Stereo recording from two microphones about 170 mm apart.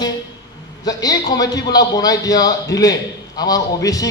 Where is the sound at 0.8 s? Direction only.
20° left (ahead or behind).